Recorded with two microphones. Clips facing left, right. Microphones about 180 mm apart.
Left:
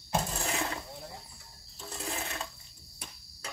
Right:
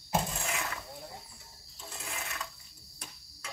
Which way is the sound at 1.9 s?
35° left (ahead or behind).